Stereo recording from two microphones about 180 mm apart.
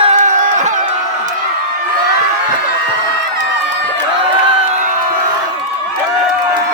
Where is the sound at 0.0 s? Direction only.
40° right (ahead or behind).